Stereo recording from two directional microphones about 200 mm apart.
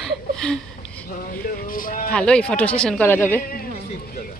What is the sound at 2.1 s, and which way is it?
Speech, 5° left (ahead or behind).